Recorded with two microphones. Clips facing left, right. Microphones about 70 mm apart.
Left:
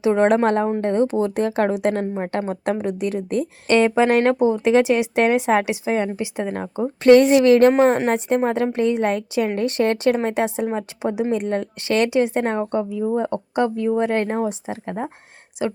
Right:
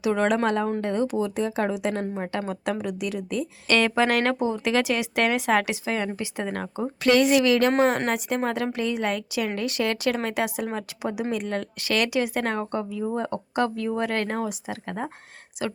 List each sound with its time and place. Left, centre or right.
0.0 s a woman's voice: left
2.5 s a woman's voice: left
3.7 s speech: left
7.0 s a woman's voice: left